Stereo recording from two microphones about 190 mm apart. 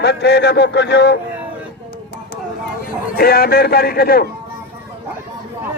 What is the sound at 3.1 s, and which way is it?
A man's voice, 55° left (ahead or behind).